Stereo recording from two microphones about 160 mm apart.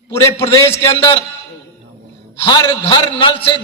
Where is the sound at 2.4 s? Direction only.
25° left (ahead or behind).